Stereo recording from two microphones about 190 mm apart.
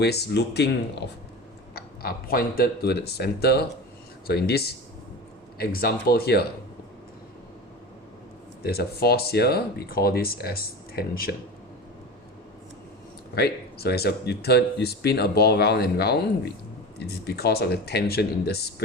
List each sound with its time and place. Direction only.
0.0 s speech: 60° left (ahead or behind)
1.7 s speech: 55° left (ahead or behind)
8.6 s speech: 55° left (ahead or behind)
13.3 s speech: 55° left (ahead or behind)